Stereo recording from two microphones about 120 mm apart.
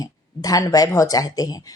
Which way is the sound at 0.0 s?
30° left (ahead or behind).